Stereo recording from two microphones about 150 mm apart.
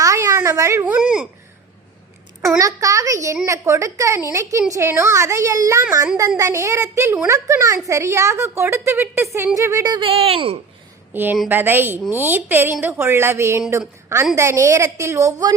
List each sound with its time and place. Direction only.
0.0 s a sound: 20° right (ahead or behind)
0.9 s a woman's voice: 10° right (ahead or behind)
2.6 s a woman's voice: 20° right (ahead or behind)
10.0 s speech: 40° right (ahead or behind)
11.1 s a woman's voice: 15° right (ahead or behind)